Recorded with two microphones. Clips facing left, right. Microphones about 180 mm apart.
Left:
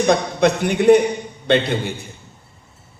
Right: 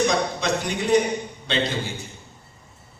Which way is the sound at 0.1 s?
60° left (ahead or behind).